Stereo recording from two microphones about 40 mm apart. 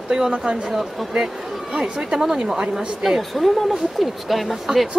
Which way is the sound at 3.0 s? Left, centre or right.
Centre.